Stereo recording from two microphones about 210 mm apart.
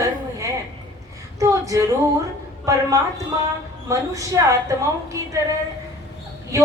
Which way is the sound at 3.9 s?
15° right (ahead or behind).